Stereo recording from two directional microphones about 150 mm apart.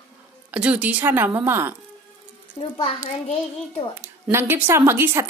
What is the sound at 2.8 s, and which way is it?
Speech, 40° left (ahead or behind).